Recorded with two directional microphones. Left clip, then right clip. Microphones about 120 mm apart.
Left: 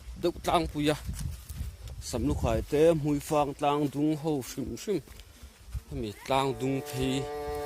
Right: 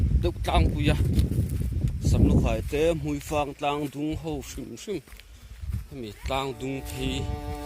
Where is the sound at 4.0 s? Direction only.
45° left (ahead or behind).